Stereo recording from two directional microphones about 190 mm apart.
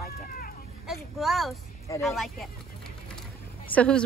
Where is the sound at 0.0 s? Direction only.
50° left (ahead or behind).